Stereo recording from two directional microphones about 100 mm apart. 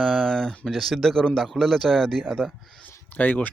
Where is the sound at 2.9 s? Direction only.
15° left (ahead or behind).